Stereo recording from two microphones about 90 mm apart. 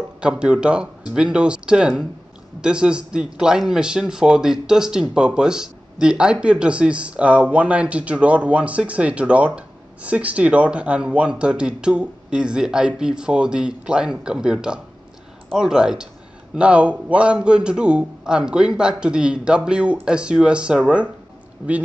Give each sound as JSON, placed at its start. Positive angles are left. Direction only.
{"t": 0.2, "sound": "a man's voice", "side_deg": -10}